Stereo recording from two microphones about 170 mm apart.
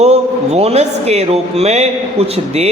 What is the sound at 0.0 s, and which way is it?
A man's voice, 40° right (ahead or behind).